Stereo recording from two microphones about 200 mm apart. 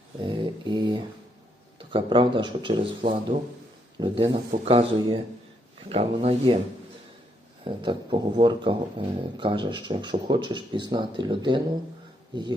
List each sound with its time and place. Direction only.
0.2 s mantra: 25° right (ahead or behind)
1.9 s speech: 25° right (ahead or behind)
7.6 s speech: 25° right (ahead or behind)